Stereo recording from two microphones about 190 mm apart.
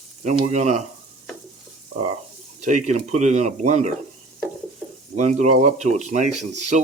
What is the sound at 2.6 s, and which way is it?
Speech, 40° right (ahead or behind).